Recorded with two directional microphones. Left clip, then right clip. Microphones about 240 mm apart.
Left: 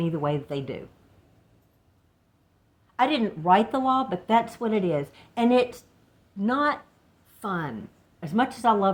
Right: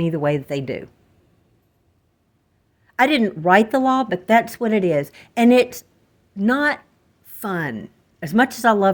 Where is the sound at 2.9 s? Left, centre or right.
Right.